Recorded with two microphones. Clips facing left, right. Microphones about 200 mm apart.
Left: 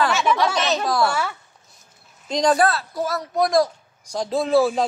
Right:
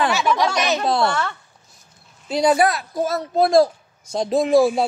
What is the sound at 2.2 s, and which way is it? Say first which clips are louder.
Speech: right 1 dB; 10° right (ahead or behind).